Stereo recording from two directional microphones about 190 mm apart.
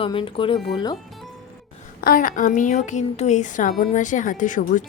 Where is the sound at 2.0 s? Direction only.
50° left (ahead or behind).